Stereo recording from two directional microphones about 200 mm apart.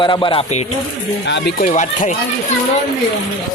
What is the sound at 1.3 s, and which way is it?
Speech, 55° left (ahead or behind).